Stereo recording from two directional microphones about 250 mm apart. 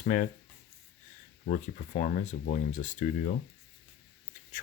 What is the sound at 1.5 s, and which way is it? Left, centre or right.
Speech, left.